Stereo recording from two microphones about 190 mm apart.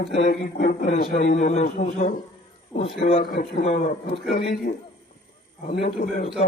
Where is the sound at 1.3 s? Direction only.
35° left (ahead or behind).